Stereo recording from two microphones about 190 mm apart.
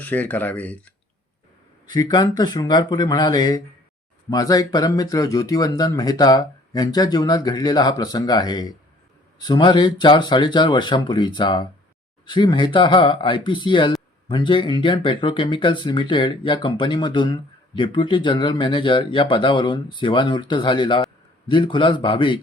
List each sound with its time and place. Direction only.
0.0 s speech: 10° left (ahead or behind)
1.9 s speech: 20° left (ahead or behind)